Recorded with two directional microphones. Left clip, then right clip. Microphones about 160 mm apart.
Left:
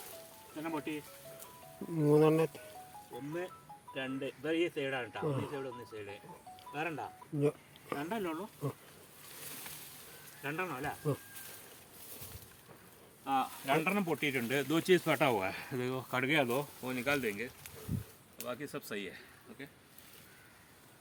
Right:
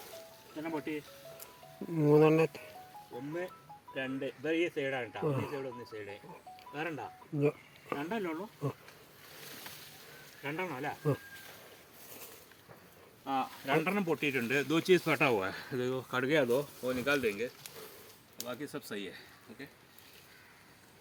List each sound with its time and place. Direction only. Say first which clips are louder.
0.5 s speech: right 1 dB; centre (ahead or behind)
3.9 s speech: right 2 dB; 5° right (ahead or behind)
10.4 s speech: right 1 dB; 5° right (ahead or behind)
13.2 s speech: left 1 dB; centre (ahead or behind)
15.4 s speech: right 2 dB; 20° left (ahead or behind)
16.8 s speech: right 3 dB; 50° left (ahead or behind)
18.4 s speech: even; 20° left (ahead or behind)